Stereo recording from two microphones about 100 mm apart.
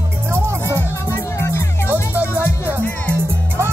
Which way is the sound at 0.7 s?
25° left (ahead or behind).